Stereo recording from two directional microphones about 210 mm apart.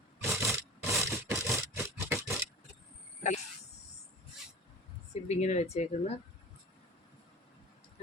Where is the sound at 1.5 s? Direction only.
15° right (ahead or behind).